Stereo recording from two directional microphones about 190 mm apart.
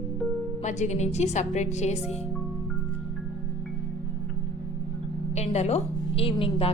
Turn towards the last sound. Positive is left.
turn(degrees=30)  # may be behind; listen again after turning